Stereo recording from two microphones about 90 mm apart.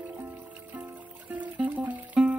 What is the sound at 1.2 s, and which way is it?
Music, 15° right (ahead or behind).